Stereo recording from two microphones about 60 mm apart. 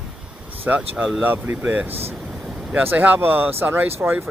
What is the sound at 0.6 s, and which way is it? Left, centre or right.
Speech, right.